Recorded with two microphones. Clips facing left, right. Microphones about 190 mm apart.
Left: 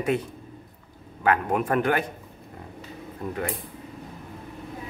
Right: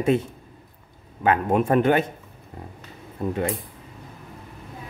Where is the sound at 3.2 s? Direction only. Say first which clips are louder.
Right 6 dB; 25° right (ahead or behind).